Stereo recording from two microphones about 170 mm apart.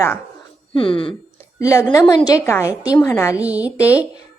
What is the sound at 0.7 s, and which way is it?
Speech, 30° left (ahead or behind).